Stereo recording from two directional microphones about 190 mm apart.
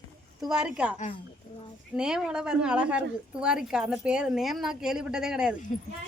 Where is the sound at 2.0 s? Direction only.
5° right (ahead or behind).